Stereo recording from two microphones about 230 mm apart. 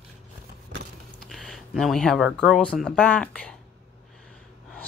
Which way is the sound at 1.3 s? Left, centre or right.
Centre.